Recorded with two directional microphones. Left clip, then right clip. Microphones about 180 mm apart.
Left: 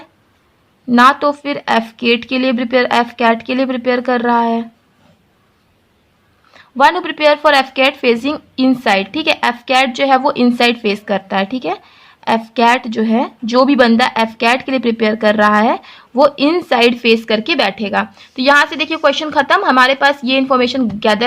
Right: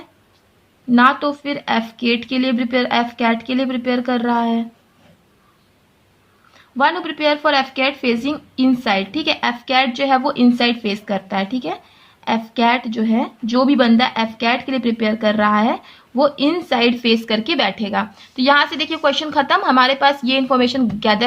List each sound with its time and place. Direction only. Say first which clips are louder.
0.9 s a woman's voice: left 4 dB; 35° left (ahead or behind)
6.5 s a woman's voice: left 6 dB; 40° left (ahead or behind)